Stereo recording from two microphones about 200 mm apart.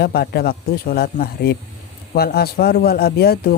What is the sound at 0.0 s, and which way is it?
Speech, 50° left (ahead or behind).